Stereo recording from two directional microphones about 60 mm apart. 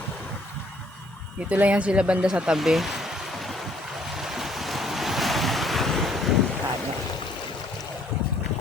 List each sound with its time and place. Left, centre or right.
1.5 s speech: right
2.6 s a sound: centre
4.1 s waves: centre